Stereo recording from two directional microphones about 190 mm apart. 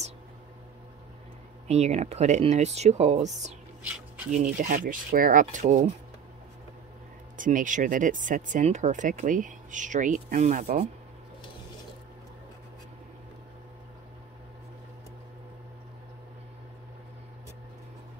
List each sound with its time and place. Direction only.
1.7 s speech: 35° right (ahead or behind)
7.3 s speech: 45° right (ahead or behind)